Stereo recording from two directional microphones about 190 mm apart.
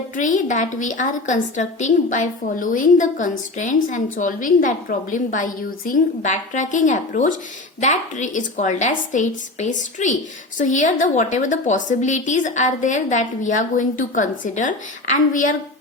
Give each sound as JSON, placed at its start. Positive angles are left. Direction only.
{"t": 0.2, "sound": "a woman's voice", "side_deg": 40}